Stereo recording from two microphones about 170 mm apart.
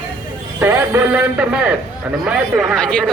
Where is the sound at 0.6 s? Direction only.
15° right (ahead or behind).